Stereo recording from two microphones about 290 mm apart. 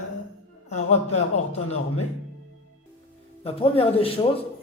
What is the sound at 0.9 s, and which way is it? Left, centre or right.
Speech, left.